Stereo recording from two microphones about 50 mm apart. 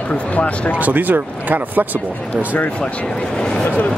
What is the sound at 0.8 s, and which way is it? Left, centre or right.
Speech, right.